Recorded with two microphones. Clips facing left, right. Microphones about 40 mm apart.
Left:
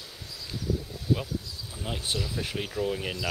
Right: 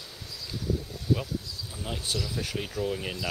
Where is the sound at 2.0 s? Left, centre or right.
Left.